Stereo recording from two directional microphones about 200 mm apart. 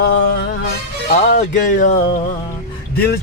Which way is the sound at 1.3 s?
40° left (ahead or behind).